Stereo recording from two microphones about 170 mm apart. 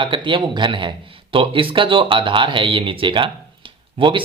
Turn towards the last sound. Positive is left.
turn(degrees=-30)  # may be behind; listen again after turning